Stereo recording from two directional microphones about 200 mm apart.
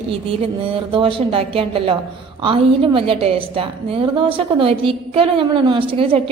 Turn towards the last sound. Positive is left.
turn(degrees=-25)  # may be behind; listen again after turning